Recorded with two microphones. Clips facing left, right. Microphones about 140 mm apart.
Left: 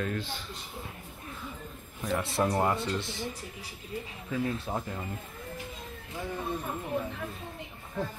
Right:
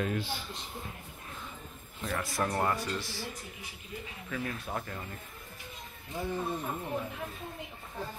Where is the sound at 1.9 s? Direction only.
15° left (ahead or behind).